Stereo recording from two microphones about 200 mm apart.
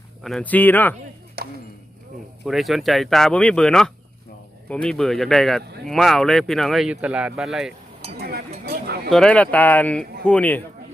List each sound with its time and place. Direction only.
0.2 s speech: centre (ahead or behind)
1.4 s a sound: 50° right (ahead or behind)
2.4 s speech: centre (ahead or behind)
8.1 s chink: 50° right (ahead or behind)
9.0 s speech: 5° left (ahead or behind)